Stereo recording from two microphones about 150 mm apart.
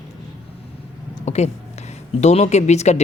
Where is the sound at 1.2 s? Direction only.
45° left (ahead or behind).